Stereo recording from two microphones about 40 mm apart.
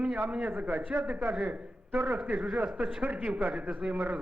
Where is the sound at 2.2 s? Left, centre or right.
Right.